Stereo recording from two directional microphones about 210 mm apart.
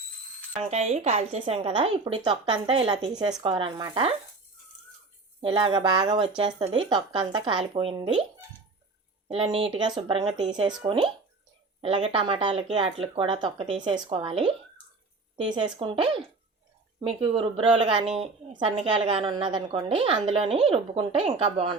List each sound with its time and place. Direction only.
0.6 s a woman's voice: 30° right (ahead or behind)
5.4 s a woman's voice: 25° right (ahead or behind)
9.2 s a woman's voice: 25° right (ahead or behind)